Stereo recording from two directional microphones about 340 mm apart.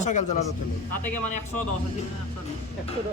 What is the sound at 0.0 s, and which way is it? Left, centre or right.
Speech, left.